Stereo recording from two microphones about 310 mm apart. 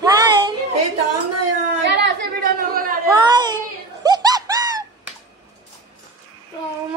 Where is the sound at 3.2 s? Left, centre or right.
Centre.